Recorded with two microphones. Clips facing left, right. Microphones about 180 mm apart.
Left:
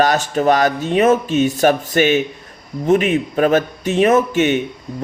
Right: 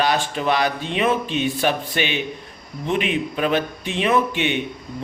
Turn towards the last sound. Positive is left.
turn(degrees=45)  # may be behind; listen again after turning